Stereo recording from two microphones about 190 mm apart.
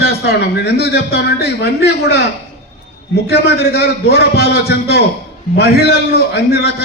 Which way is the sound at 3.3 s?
55° left (ahead or behind).